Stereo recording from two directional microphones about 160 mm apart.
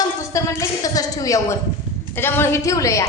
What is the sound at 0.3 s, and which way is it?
A woman's voice, 20° left (ahead or behind).